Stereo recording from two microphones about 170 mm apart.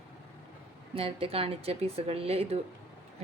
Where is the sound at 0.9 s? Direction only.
35° right (ahead or behind).